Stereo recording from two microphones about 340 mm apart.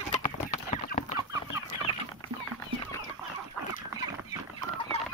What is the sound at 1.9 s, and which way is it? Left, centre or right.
Chicken, centre.